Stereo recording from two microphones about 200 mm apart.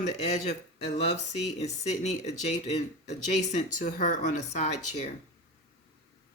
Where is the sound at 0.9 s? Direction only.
35° left (ahead or behind).